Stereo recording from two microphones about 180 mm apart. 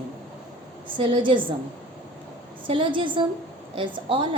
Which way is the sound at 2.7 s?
30° right (ahead or behind).